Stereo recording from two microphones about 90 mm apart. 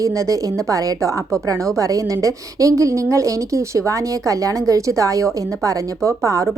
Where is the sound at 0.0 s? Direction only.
40° right (ahead or behind).